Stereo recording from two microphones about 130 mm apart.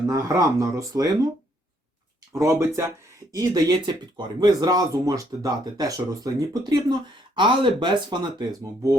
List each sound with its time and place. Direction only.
0.1 s speech: 25° right (ahead or behind)
2.4 s speech: 20° right (ahead or behind)
3.3 s speech: 30° right (ahead or behind)